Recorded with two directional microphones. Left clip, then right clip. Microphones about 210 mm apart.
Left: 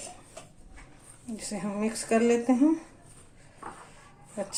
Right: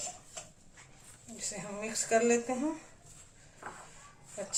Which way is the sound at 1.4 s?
40° left (ahead or behind).